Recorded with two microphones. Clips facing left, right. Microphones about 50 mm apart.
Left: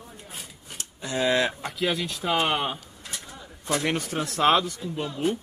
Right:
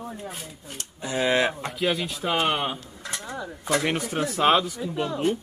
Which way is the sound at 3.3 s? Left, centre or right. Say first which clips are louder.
Right 3 dB; right.